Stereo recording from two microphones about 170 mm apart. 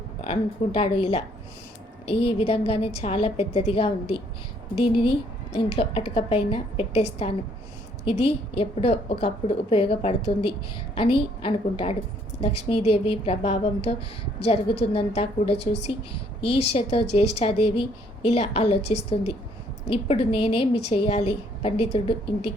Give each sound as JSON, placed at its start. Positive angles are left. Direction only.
{"t": 0.3, "sound": "a woman's voice", "side_deg": 35}
{"t": 5.5, "sound": "a woman's voice", "side_deg": 35}